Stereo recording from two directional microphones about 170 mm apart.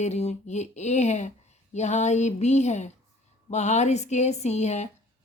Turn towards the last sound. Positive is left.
turn(degrees=40)  # may be behind; listen again after turning